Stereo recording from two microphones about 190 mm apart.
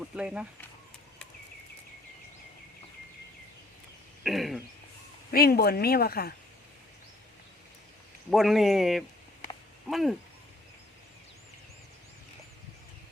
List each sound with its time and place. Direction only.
0.0 s speech: 5° right (ahead or behind)
4.2 s throat clearing: centre (ahead or behind)
5.3 s speech: 55° left (ahead or behind)
8.3 s speech: centre (ahead or behind)